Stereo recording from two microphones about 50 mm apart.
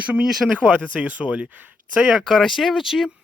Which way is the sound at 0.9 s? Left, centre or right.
Right.